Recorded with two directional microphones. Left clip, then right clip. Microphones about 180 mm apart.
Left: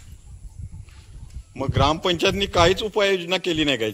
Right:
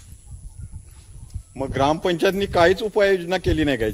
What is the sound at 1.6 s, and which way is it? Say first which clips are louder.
A man's voice: right 1 dB; 55° right (ahead or behind).